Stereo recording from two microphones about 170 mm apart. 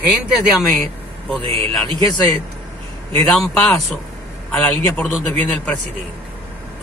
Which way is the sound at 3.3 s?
Centre (ahead or behind).